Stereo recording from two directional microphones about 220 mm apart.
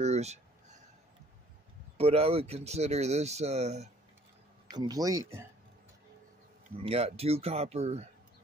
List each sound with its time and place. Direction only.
0.0 s speech: 30° right (ahead or behind)
2.0 s speech: 25° right (ahead or behind)
4.6 s speech: 15° right (ahead or behind)
6.8 s speech: 25° right (ahead or behind)